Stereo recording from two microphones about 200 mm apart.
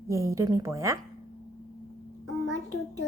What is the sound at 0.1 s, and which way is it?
Speech, 15° right (ahead or behind).